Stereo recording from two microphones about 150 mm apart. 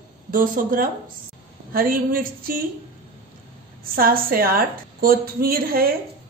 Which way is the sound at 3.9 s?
75° right (ahead or behind).